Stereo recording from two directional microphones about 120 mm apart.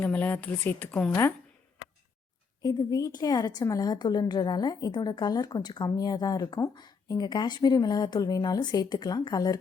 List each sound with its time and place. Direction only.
0.0 s speech: 15° left (ahead or behind)
2.6 s a woman's voice: 35° left (ahead or behind)